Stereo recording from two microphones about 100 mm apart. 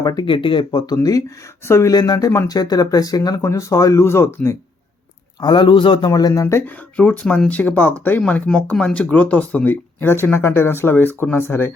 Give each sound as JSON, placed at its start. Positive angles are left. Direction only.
{"t": 0.0, "sound": "speech", "side_deg": 40}
{"t": 0.3, "sound": "speech", "side_deg": 60}
{"t": 1.6, "sound": "speech", "side_deg": 25}
{"t": 1.9, "sound": "speech", "side_deg": 40}
{"t": 5.4, "sound": "a man's voice", "side_deg": 50}
{"t": 6.1, "sound": "speech", "side_deg": 40}
{"t": 6.4, "sound": "speech", "side_deg": 25}
{"t": 6.9, "sound": "speech", "side_deg": 15}